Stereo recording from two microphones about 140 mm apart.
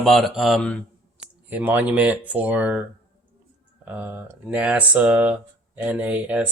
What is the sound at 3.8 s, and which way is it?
Speech, 10° right (ahead or behind).